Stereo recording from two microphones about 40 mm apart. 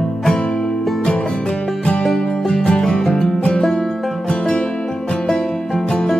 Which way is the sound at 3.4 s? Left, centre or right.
Left.